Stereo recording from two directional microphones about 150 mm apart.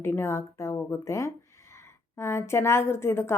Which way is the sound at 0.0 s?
15° left (ahead or behind).